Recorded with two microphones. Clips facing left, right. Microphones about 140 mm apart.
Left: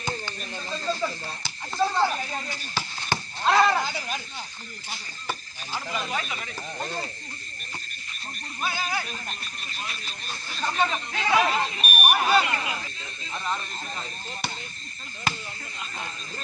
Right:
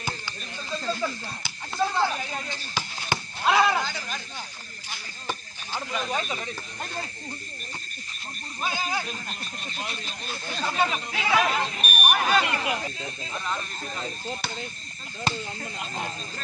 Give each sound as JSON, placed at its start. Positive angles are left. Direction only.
{"t": 1.0, "sound": "speech", "side_deg": 0}
{"t": 3.8, "sound": "speech", "side_deg": 10}
{"t": 5.3, "sound": "speech", "side_deg": 10}
{"t": 6.1, "sound": "speech", "side_deg": -30}
{"t": 8.6, "sound": "speech", "side_deg": -15}
{"t": 9.4, "sound": "speech", "side_deg": -30}
{"t": 10.6, "sound": "speech", "side_deg": -10}
{"t": 11.3, "sound": "speech", "side_deg": 5}
{"t": 12.6, "sound": "speech", "side_deg": -55}